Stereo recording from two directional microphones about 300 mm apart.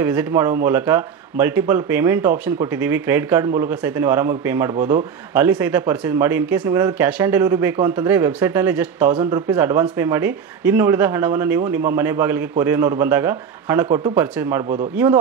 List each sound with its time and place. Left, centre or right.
0.0 s speech: centre